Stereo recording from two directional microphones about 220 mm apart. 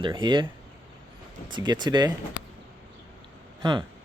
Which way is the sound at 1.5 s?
20° right (ahead or behind).